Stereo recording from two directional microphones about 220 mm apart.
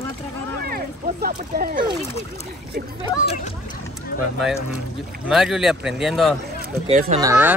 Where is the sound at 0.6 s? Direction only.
45° right (ahead or behind).